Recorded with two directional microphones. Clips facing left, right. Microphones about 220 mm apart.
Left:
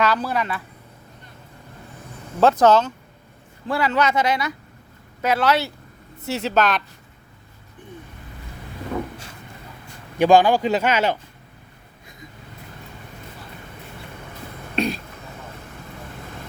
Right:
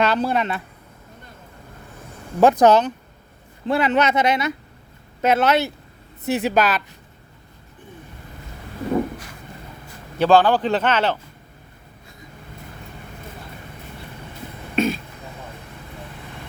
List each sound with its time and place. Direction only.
0.0 s speech: 25° right (ahead or behind)
2.4 s speech: 15° right (ahead or behind)
10.2 s speech: 15° left (ahead or behind)
14.8 s throat clearing: centre (ahead or behind)